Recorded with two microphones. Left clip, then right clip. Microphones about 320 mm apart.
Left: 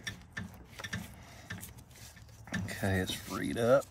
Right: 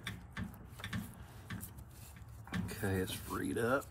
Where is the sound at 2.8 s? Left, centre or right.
Left.